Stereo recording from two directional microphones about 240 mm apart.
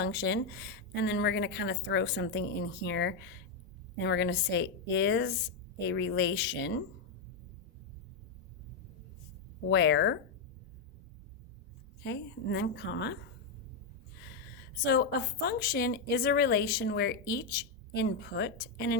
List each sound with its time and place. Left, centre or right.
0.0 s a woman's voice: left
9.6 s a woman's voice: left
12.0 s a woman's voice: left
14.8 s a woman's voice: left